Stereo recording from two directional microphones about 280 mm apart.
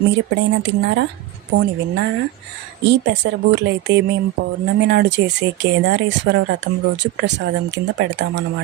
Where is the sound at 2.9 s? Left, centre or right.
Right.